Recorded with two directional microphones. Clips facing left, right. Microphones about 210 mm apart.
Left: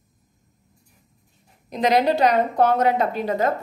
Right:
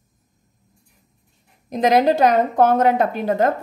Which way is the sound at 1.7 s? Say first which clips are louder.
Right 3 dB; 45° right (ahead or behind).